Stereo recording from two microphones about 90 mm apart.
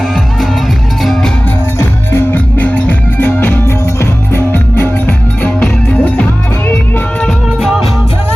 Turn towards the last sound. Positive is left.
turn(degrees=-5)  # may be behind; listen again after turning